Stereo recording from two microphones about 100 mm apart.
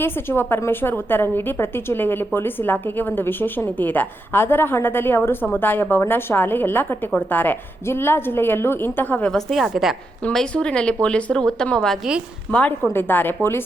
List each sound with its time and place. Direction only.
0.0 s a woman's voice: 20° left (ahead or behind)
9.3 s a woman's voice: centre (ahead or behind)
10.2 s a woman's voice: 10° left (ahead or behind)